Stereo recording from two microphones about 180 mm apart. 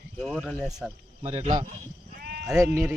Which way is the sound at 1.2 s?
35° right (ahead or behind).